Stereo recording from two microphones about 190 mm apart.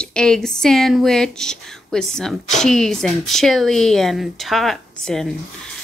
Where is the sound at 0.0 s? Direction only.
5° left (ahead or behind).